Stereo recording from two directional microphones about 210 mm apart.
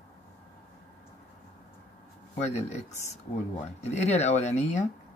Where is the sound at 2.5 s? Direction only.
35° left (ahead or behind).